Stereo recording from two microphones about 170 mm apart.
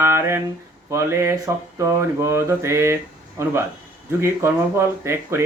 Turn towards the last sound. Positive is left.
turn(degrees=-15)  # may be behind; listen again after turning